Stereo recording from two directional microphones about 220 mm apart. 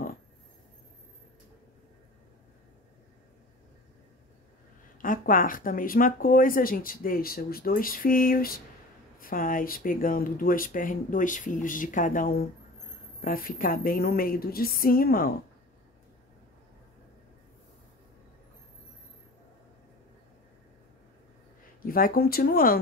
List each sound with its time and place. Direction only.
5.0 s speech: 40° left (ahead or behind)
21.8 s speech: 40° left (ahead or behind)